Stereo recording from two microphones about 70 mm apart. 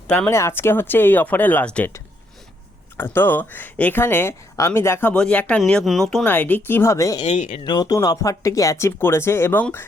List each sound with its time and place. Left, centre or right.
0.3 s speech: left; by 1.9 s centre
3.0 s speech: left
5.1 s speech: centre
5.5 s speech: centre
5.8 s speech: centre
6.2 s speech: left
6.9 s speech: left
7.2 s speech: left
7.9 s speech: left
9.0 s speech: left